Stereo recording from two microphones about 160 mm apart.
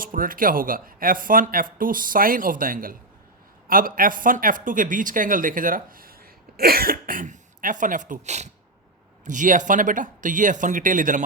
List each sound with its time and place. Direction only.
0.0 s speech: 60° right (ahead or behind)